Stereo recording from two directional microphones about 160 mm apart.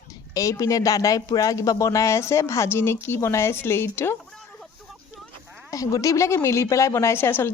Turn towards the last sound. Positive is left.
turn(degrees=15)  # may be behind; listen again after turning